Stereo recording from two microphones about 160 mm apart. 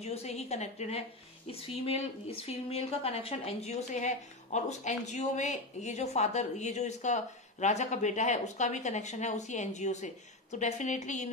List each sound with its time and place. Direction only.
0.0 s a woman's voice: 40° left (ahead or behind)